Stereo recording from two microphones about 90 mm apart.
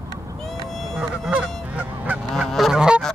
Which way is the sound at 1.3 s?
15° right (ahead or behind).